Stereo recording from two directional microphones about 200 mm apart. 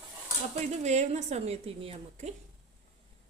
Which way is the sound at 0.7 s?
35° right (ahead or behind).